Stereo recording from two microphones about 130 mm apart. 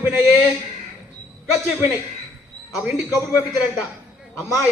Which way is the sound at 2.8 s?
10° right (ahead or behind).